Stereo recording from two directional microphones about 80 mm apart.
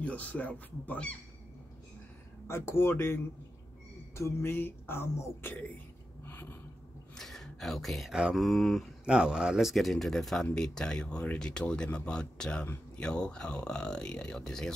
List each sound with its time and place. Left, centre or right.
0.0 s speech: centre
2.4 s speech: left
6.2 s a sound: left
7.2 s a sound: centre
8.1 s mantra: centre
8.4 s speech: centre
9.0 s speech: centre